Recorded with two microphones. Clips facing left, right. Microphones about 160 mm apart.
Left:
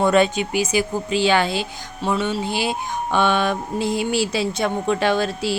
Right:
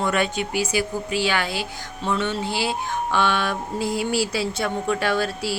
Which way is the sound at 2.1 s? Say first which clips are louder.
Left 1 dB; 10° left (ahead or behind).